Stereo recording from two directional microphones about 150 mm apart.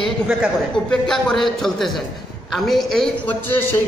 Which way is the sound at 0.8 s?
5° left (ahead or behind).